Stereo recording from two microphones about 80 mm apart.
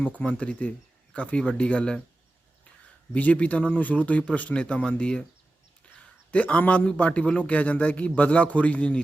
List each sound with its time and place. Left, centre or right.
0.2 s a man's voice: centre
3.1 s a man's voice: centre
6.3 s a man's voice: centre